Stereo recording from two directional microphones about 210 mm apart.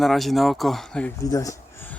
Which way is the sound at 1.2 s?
15° left (ahead or behind).